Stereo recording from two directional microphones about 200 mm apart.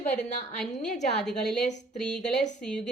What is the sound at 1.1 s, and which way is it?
A woman's voice, centre (ahead or behind).